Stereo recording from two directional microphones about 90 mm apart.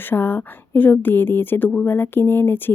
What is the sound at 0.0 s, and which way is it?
Speech, 25° left (ahead or behind).